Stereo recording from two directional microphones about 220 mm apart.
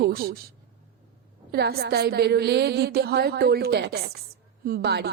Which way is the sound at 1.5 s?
45° right (ahead or behind).